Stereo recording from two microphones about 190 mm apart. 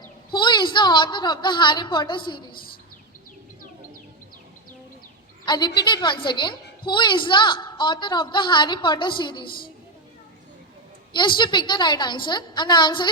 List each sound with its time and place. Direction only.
0.3 s a woman's voice: 25° left (ahead or behind)
5.5 s a woman's voice: 25° left (ahead or behind)
11.1 s a woman's voice: 25° left (ahead or behind)